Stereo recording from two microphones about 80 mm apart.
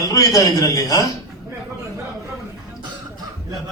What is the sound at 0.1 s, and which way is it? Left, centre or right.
Speech, left.